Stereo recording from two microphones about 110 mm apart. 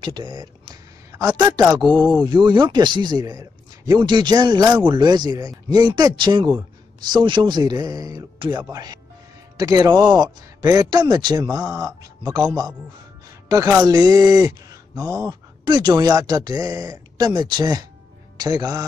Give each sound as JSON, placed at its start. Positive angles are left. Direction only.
{"t": 0.0, "sound": "speech", "side_deg": -45}
{"t": 1.8, "sound": "speech", "side_deg": 5}
{"t": 2.2, "sound": "speech", "side_deg": -45}
{"t": 13.5, "sound": "speech", "side_deg": -35}
{"t": 15.6, "sound": "speech", "side_deg": -40}